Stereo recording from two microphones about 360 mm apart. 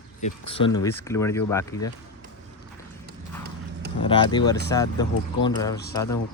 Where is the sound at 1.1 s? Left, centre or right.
Centre.